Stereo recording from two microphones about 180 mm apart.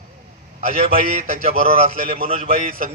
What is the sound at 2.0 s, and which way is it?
Speech, 50° right (ahead or behind).